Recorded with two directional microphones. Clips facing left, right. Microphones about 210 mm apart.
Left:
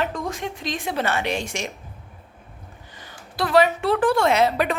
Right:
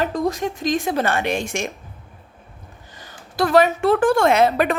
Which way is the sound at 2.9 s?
45° right (ahead or behind).